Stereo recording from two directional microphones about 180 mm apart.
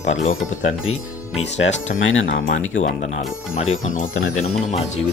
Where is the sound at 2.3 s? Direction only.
55° left (ahead or behind).